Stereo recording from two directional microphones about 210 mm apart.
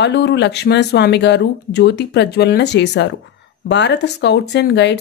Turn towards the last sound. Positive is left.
turn(degrees=55)  # may be behind; listen again after turning